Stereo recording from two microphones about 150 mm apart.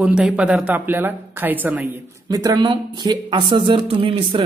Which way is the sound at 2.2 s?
25° right (ahead or behind).